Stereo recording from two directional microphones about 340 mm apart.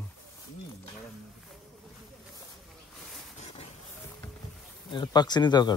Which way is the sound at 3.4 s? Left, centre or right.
Centre.